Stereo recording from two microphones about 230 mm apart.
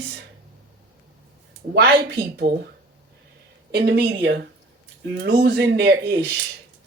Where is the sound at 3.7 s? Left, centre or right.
Right.